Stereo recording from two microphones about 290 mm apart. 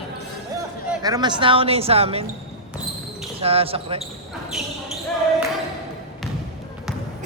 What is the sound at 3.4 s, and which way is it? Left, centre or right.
Speech, centre.